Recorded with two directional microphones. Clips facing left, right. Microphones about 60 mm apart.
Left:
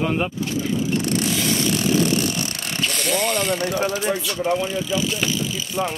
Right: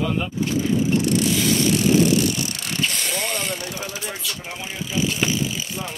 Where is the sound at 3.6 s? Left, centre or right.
Left.